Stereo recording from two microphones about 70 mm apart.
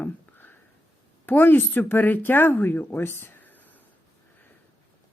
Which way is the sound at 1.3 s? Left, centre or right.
Left.